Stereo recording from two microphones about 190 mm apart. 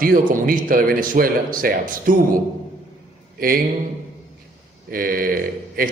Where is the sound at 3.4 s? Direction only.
50° right (ahead or behind).